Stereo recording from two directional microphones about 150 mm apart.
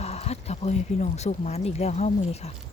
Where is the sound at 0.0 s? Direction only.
45° left (ahead or behind).